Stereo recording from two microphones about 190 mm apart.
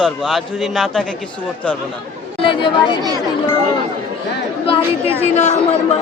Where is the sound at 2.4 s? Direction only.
25° left (ahead or behind).